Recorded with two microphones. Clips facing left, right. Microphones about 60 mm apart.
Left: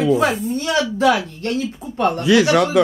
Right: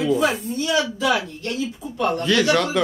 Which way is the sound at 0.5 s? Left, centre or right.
Left.